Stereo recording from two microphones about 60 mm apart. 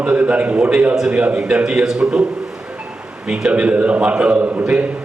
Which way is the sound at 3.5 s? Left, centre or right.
Right.